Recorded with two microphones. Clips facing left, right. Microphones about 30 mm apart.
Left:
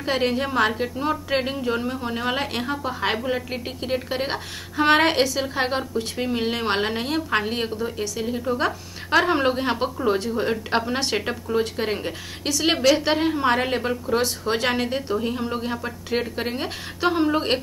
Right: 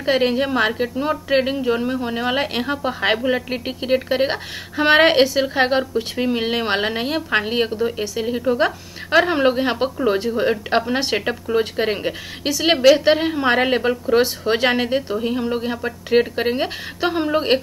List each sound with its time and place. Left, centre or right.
0.0 s a woman's voice: centre
9.1 s a woman's voice: centre